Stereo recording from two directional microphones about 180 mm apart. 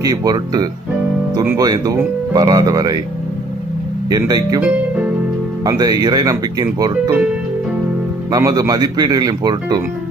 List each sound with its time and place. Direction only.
0.0 s speech: 20° right (ahead or behind)
4.1 s speech: 20° right (ahead or behind)
4.6 s speech: 10° right (ahead or behind)
5.7 s speech: 20° right (ahead or behind)
8.3 s speech: 20° right (ahead or behind)